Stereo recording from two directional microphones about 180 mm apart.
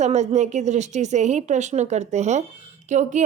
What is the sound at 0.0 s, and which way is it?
A woman's voice, 40° right (ahead or behind).